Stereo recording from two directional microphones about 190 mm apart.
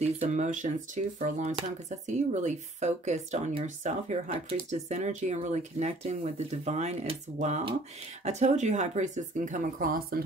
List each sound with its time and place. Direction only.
0.0 s speech: 35° right (ahead or behind)